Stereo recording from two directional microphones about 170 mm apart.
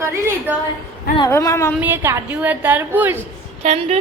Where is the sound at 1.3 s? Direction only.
15° left (ahead or behind).